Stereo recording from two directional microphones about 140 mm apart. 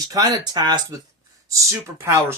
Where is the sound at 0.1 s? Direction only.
25° right (ahead or behind).